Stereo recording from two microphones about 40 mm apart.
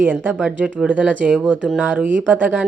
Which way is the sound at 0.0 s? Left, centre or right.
Right.